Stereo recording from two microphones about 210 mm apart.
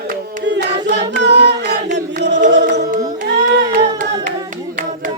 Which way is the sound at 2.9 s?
40° right (ahead or behind).